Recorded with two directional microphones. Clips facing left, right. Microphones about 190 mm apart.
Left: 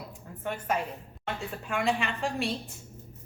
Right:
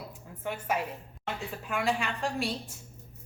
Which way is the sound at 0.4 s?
5° right (ahead or behind).